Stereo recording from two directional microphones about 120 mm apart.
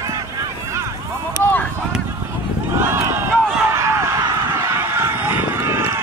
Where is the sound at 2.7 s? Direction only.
20° right (ahead or behind).